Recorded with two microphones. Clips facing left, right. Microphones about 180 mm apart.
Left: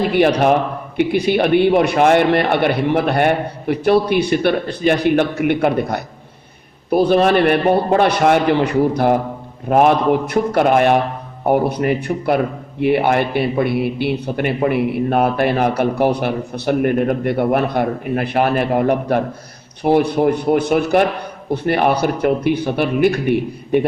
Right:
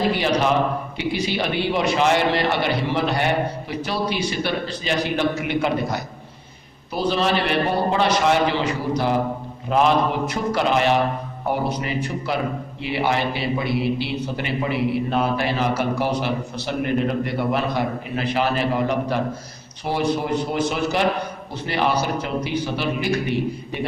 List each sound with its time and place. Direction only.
0.1 s a man's voice: 55° left (ahead or behind)